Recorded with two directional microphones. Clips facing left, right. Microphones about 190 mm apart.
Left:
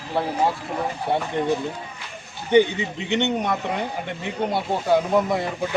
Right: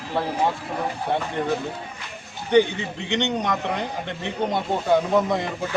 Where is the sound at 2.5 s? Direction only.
15° left (ahead or behind).